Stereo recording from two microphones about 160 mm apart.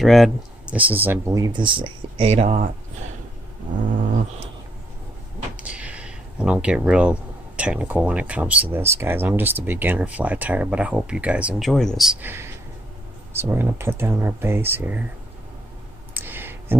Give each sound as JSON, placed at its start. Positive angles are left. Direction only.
{"t": 0.0, "sound": "speech", "side_deg": 0}
{"t": 5.6, "sound": "speech", "side_deg": -10}
{"t": 11.7, "sound": "speech", "side_deg": 5}
{"t": 12.2, "sound": "speech", "side_deg": -15}
{"t": 16.1, "sound": "a sound", "side_deg": -15}